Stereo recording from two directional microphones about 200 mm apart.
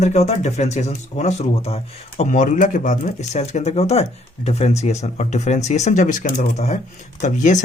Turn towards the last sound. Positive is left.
turn(degrees=40)  # may be behind; listen again after turning